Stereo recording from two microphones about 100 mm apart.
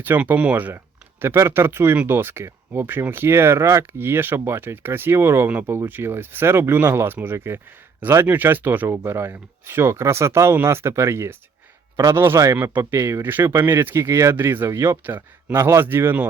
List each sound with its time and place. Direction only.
0.0 s speech: 20° right (ahead or behind)